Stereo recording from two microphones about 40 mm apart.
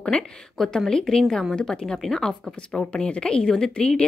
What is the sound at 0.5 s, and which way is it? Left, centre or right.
A woman's voice, centre.